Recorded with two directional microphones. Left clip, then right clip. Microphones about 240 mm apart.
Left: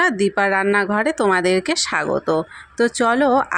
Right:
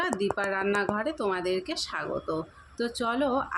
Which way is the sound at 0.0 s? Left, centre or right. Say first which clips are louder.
Left 11 dB; left.